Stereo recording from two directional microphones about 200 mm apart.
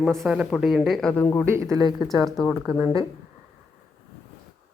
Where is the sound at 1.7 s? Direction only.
20° right (ahead or behind).